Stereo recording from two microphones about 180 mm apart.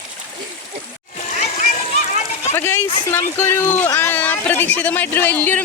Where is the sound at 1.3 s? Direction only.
50° left (ahead or behind).